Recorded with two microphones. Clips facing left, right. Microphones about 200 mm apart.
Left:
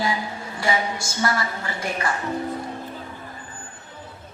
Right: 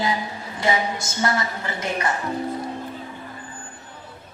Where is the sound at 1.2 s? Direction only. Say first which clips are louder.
Right 1 dB; 20° right (ahead or behind).